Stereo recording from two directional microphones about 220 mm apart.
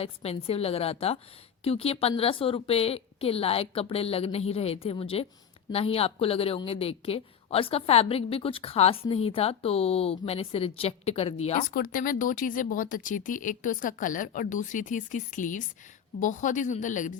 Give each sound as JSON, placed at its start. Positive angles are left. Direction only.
{"t": 0.0, "sound": "a woman's voice", "side_deg": 25}
{"t": 11.7, "sound": "speech", "side_deg": 40}